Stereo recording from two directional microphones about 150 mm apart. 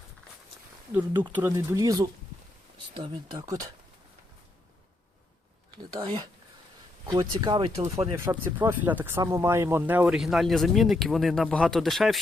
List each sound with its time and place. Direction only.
1.3 s speech: 15° right (ahead or behind)
2.9 s speech: 35° right (ahead or behind)
5.7 s speech: 40° right (ahead or behind)
7.0 s speech: 25° right (ahead or behind)
8.1 s speech: 20° right (ahead or behind)
10.2 s speech: centre (ahead or behind)